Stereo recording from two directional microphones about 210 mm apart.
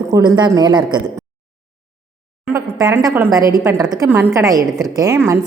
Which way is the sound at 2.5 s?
15° right (ahead or behind).